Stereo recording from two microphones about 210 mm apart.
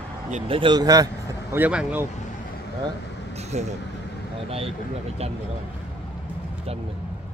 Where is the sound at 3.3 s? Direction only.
30° right (ahead or behind).